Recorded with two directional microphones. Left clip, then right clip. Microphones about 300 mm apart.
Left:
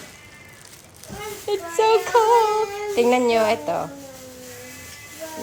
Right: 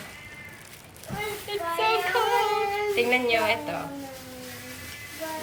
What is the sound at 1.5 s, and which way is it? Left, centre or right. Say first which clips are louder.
Speech: left 7 dB; centre.